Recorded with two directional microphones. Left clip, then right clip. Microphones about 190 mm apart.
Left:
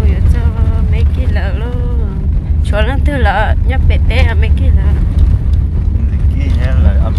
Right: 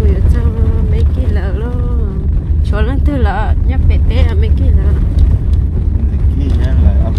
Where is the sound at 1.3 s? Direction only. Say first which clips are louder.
Left 2 dB; 10° right (ahead or behind).